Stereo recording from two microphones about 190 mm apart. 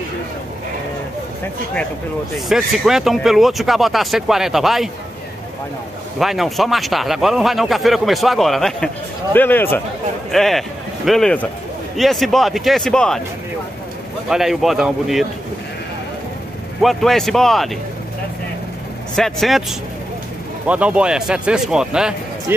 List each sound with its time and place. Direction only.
2.3 s speech: centre (ahead or behind)
6.1 s speech: centre (ahead or behind)
14.3 s speech: centre (ahead or behind)
16.8 s speech: centre (ahead or behind)
19.1 s speech: centre (ahead or behind)
20.6 s speech: 5° right (ahead or behind)